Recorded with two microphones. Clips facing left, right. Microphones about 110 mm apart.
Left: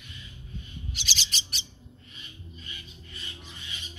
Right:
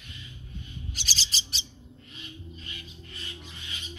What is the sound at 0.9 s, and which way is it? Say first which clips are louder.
Bird: left 1 dB; 40° right (ahead or behind).